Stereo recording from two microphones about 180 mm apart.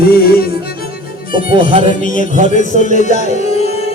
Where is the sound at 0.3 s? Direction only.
55° left (ahead or behind).